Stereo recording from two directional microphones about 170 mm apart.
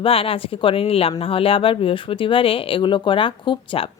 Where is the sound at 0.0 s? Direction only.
35° left (ahead or behind).